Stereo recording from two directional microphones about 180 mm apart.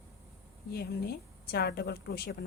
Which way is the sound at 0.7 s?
60° left (ahead or behind).